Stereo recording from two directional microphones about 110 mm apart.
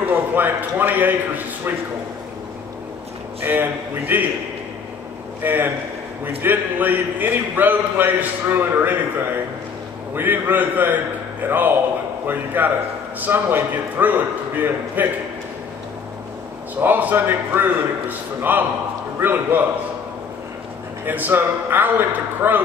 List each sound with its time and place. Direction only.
0.0 s a man's voice: 15° right (ahead or behind)
3.4 s a man's voice: 15° right (ahead or behind)
5.4 s a man's voice: 20° right (ahead or behind)
10.1 s a man's voice: 15° right (ahead or behind)
16.8 s a man's voice: 15° right (ahead or behind)
21.0 s a man's voice: 15° right (ahead or behind)